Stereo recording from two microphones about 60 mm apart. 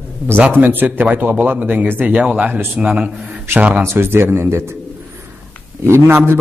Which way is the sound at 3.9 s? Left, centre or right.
Right.